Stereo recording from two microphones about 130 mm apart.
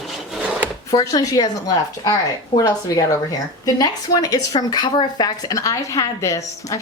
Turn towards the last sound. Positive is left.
turn(degrees=25)  # may be behind; listen again after turning